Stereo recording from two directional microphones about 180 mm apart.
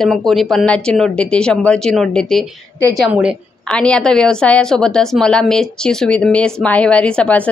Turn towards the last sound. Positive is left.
turn(degrees=5)  # may be behind; listen again after turning